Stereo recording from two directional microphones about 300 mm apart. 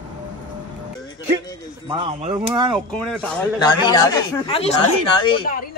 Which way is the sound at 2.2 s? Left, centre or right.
Centre.